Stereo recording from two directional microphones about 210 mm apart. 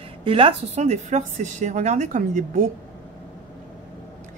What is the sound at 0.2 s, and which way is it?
A woman's voice, 25° right (ahead or behind).